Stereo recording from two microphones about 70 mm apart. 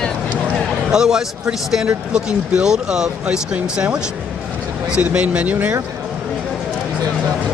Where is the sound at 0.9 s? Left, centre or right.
Centre.